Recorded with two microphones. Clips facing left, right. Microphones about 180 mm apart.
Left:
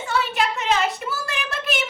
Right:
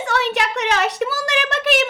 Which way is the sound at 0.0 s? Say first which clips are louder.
Right 2 dB; 75° right (ahead or behind).